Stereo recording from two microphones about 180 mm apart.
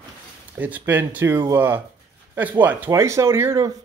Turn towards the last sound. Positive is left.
turn(degrees=-15)  # may be behind; listen again after turning